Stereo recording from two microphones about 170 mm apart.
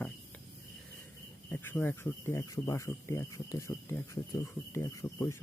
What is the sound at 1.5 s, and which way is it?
Speech, 10° left (ahead or behind).